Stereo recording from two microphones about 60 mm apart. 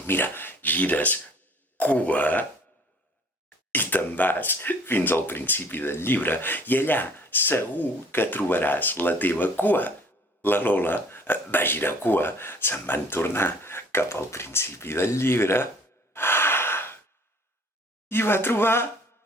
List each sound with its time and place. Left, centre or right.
0.0 s speech: left
3.7 s speech: left
16.1 s gasp: left
18.1 s speech: left